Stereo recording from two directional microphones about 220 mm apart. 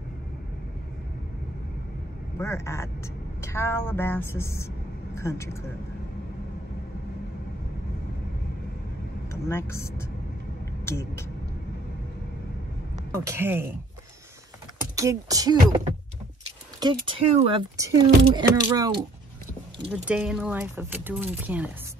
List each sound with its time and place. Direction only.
2.3 s a woman's voice: 10° left (ahead or behind)
9.3 s a woman's voice: 15° left (ahead or behind)
12.9 s speech: 10° right (ahead or behind)
15.0 s speech: 15° right (ahead or behind)
16.8 s speech: 20° right (ahead or behind)
19.9 s speech: 5° right (ahead or behind)